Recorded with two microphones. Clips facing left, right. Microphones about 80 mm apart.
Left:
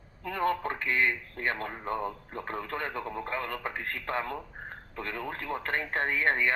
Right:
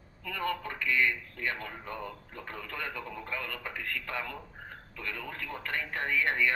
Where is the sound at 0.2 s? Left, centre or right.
Left.